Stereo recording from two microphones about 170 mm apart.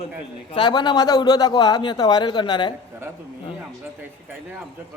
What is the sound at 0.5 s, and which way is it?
A man's voice, 25° left (ahead or behind).